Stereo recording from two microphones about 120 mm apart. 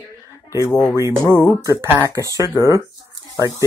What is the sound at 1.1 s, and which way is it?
Speech, 30° left (ahead or behind).